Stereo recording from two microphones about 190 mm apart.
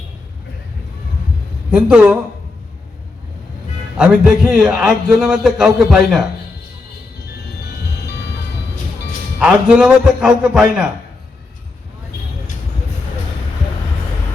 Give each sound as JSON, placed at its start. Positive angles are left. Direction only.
{"t": 1.7, "sound": "a man's voice", "side_deg": -5}
{"t": 3.9, "sound": "a man's voice", "side_deg": -5}
{"t": 7.3, "sound": "music", "side_deg": 60}
{"t": 9.4, "sound": "a man's voice", "side_deg": -5}